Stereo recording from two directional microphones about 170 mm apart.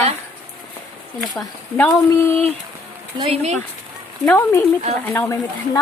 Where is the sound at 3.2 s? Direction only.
35° right (ahead or behind).